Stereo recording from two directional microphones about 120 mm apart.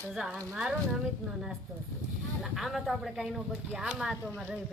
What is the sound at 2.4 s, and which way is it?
A woman's voice, centre (ahead or behind).